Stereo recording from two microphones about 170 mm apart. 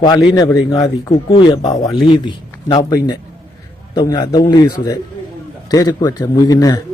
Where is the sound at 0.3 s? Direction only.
20° left (ahead or behind).